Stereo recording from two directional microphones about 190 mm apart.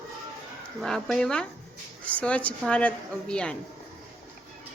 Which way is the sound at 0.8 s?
5° left (ahead or behind).